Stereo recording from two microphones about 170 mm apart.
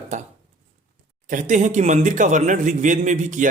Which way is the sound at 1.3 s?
45° right (ahead or behind).